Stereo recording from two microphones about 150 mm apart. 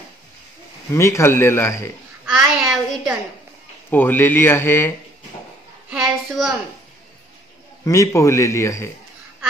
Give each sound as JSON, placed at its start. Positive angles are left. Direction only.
{"t": 0.9, "sound": "speech", "side_deg": 20}
{"t": 2.2, "sound": "a sound", "side_deg": 0}
{"t": 3.9, "sound": "speech", "side_deg": 15}
{"t": 5.9, "sound": "child singing", "side_deg": 0}
{"t": 7.8, "sound": "a man's voice", "side_deg": 20}